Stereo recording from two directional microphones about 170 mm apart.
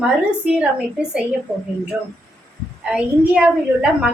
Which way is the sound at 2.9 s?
5° right (ahead or behind).